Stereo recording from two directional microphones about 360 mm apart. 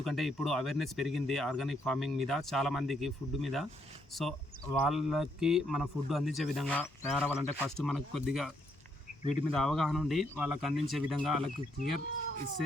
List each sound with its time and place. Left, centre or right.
0.0 s speech: centre